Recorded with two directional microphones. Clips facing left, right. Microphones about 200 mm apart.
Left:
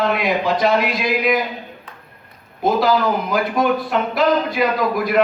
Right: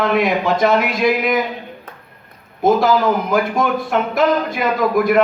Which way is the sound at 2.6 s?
50° right (ahead or behind).